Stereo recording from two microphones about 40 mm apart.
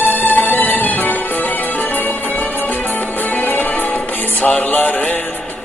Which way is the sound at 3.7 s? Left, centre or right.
Left.